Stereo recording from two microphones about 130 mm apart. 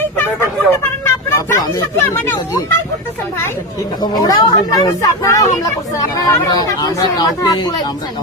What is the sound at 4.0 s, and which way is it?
Speech, 30° left (ahead or behind).